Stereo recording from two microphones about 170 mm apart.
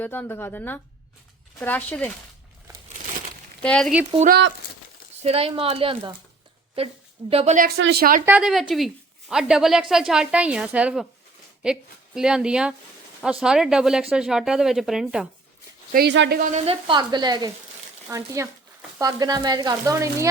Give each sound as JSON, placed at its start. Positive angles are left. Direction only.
{"t": 0.0, "sound": "speech", "side_deg": 10}
{"t": 3.6, "sound": "speech", "side_deg": 5}
{"t": 4.3, "sound": "speech", "side_deg": -90}
{"t": 5.2, "sound": "a woman's voice", "side_deg": -35}
{"t": 7.8, "sound": "a woman's voice", "side_deg": -80}
{"t": 8.2, "sound": "speech", "side_deg": -10}
{"t": 15.9, "sound": "a woman's voice", "side_deg": -75}
{"t": 16.4, "sound": "speech", "side_deg": -40}